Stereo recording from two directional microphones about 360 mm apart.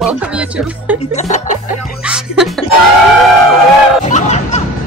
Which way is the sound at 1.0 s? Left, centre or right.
Centre.